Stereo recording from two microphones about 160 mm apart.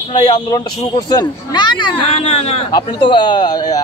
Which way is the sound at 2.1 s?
40° left (ahead or behind).